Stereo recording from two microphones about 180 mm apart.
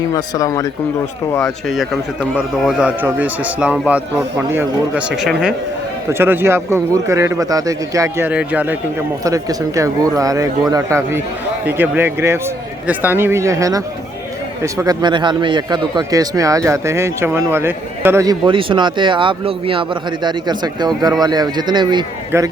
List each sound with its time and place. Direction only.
0.1 s speech: 20° left (ahead or behind)
1.3 s a man's voice: 5° left (ahead or behind)
9.2 s a man's voice: 20° right (ahead or behind)